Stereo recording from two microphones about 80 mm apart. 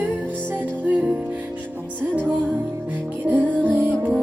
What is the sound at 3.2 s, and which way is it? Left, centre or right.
Music, right.